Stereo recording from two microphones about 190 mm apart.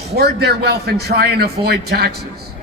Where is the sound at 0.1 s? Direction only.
60° right (ahead or behind).